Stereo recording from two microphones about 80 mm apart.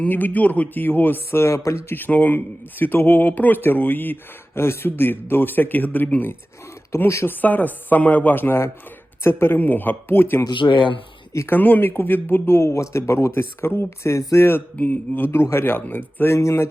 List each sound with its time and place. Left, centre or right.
0.0 s speech: left
2.0 s speech: left
6.9 s speech: left
10.5 s speech: left
11.3 s speech: left
14.8 s speech: left
15.4 s speech: left